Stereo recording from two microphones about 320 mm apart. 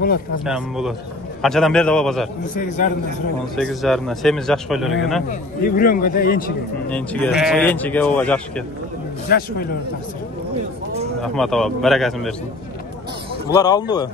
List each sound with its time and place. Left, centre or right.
0.5 s a man's voice: centre
2.5 s speech: left
3.5 s a man's voice: centre
5.3 s speech: left
6.9 s a man's voice: centre
9.3 s speech: left
11.2 s a man's voice: centre
13.5 s speech: centre